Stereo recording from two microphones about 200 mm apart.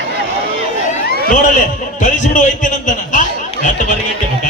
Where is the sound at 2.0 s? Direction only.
40° left (ahead or behind).